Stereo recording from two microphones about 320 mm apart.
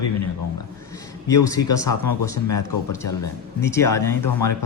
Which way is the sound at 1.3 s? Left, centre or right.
Centre.